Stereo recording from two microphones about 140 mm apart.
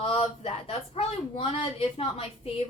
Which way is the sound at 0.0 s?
45° left (ahead or behind).